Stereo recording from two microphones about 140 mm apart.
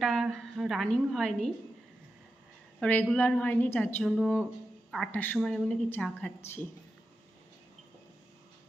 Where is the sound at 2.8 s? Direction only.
10° left (ahead or behind).